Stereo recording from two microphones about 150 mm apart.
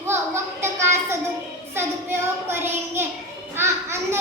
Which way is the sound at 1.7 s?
15° right (ahead or behind).